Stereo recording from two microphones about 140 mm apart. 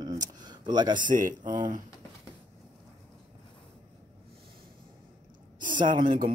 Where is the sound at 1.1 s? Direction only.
70° right (ahead or behind).